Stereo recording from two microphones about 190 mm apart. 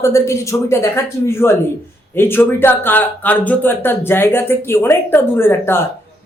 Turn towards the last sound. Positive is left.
turn(degrees=10)  # may be behind; listen again after turning